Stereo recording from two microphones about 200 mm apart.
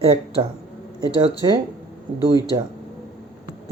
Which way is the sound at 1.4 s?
20° right (ahead or behind).